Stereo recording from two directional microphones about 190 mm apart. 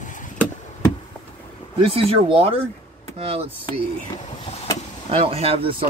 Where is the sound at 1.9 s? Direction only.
30° right (ahead or behind).